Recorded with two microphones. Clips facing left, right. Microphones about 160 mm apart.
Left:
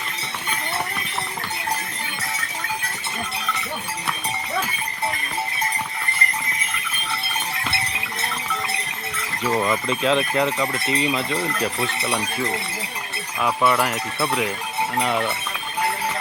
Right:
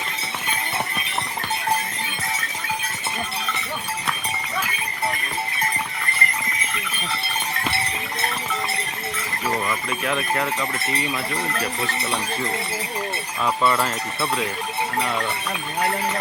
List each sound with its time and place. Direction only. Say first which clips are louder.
9.6 s speech: left 5 dB; 25° left (ahead or behind)
13.4 s speech: left 1 dB; 10° left (ahead or behind)